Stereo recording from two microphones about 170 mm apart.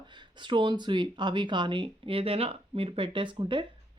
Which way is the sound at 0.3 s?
30° right (ahead or behind).